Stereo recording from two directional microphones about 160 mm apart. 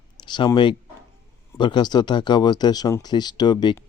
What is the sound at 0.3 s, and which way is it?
Speech, 30° left (ahead or behind).